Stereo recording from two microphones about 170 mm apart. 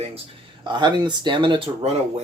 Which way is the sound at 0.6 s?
25° right (ahead or behind).